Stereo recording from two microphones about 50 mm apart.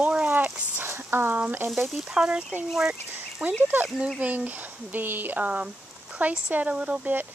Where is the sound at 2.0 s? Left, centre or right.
Centre.